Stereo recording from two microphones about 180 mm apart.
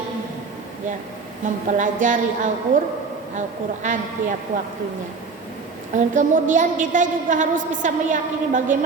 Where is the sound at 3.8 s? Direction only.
45° right (ahead or behind).